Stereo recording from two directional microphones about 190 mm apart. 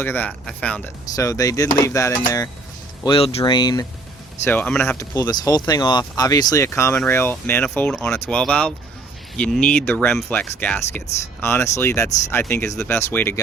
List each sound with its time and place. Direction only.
0.0 s speech: 10° left (ahead or behind)
1.1 s speech: 20° left (ahead or behind)
4.4 s speech: 10° left (ahead or behind)